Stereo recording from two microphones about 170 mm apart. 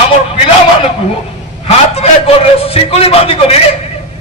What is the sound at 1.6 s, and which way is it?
A man's voice, 35° left (ahead or behind).